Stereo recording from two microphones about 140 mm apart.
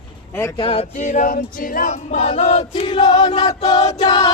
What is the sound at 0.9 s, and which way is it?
Choir, 65° left (ahead or behind).